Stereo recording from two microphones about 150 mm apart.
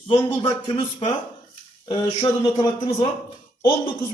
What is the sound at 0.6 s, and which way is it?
A man's voice, 35° left (ahead or behind).